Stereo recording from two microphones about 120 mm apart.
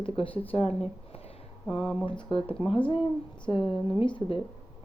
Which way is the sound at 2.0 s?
45° left (ahead or behind).